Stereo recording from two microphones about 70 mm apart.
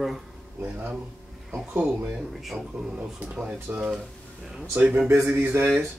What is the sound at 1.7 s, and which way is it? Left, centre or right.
Speech, right.